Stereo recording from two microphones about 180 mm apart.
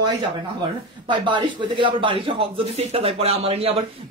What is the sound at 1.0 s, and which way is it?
Speech, 25° right (ahead or behind).